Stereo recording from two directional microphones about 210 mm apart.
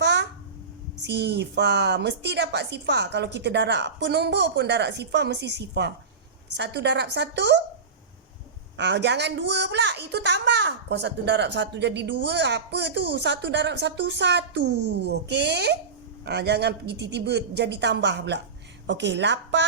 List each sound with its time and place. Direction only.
0.0 s a sound: 55° right (ahead or behind)
1.0 s a woman's voice: 55° right (ahead or behind)
8.8 s a woman's voice: 55° right (ahead or behind)